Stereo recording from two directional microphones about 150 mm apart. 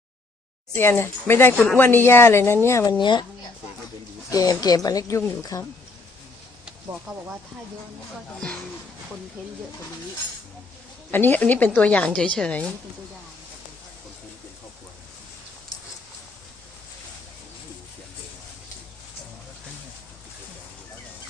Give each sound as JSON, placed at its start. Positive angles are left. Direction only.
{"t": 0.8, "sound": "a woman's voice", "side_deg": 15}
{"t": 3.0, "sound": "speech", "side_deg": 30}
{"t": 4.3, "sound": "a woman's voice", "side_deg": 25}
{"t": 11.1, "sound": "a woman's voice", "side_deg": 10}